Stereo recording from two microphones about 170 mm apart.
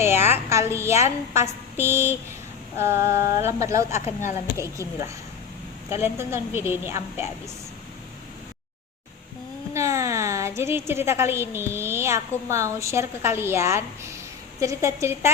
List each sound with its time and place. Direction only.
0.0 s a woman's voice: 15° right (ahead or behind)
3.9 s speech: 45° left (ahead or behind)
5.9 s a woman's voice: 15° right (ahead or behind)
9.7 s a woman's voice: 15° right (ahead or behind)